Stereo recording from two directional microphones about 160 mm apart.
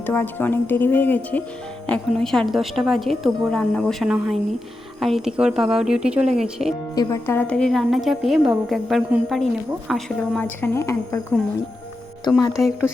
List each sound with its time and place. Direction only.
0.0 s speech: 15° left (ahead or behind); by 6.7 s 5° right (ahead or behind)
6.9 s speech: 20° left (ahead or behind); by 10.7 s 5° left (ahead or behind)
10.8 s speech: 20° left (ahead or behind)
12.5 s speech: centre (ahead or behind)